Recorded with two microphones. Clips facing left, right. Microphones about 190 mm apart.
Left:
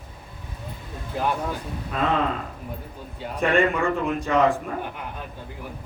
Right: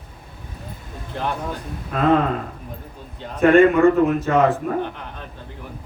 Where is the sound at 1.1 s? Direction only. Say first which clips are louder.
Left 1 dB; 5° left (ahead or behind).